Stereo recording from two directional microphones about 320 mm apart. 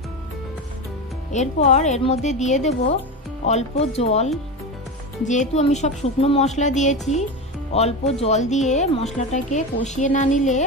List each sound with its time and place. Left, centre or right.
1.3 s a woman's voice: left